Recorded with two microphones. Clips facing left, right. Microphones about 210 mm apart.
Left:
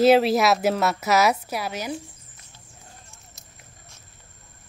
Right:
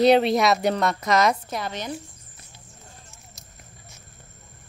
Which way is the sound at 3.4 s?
Centre (ahead or behind).